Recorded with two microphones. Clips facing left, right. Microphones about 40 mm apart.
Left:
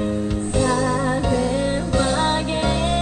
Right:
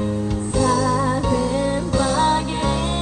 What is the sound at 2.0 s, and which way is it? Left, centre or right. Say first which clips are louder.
Music: right 2 dB; left.